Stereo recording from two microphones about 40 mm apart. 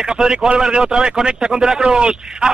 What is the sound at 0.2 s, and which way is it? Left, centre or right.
A man's voice, centre.